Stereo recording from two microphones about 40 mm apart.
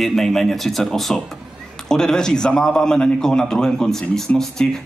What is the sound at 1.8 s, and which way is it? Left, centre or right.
A man's voice, centre.